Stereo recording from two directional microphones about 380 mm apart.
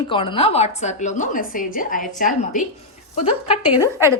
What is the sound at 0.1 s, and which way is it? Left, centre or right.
A woman's voice, centre.